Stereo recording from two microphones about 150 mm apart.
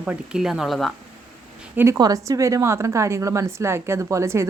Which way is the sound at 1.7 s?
15° right (ahead or behind).